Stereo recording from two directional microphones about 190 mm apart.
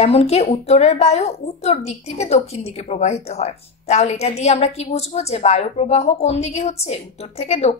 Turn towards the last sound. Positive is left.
turn(degrees=35)  # may be behind; listen again after turning